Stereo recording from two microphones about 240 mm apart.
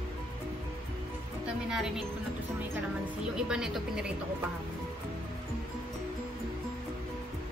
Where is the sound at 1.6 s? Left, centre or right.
Centre.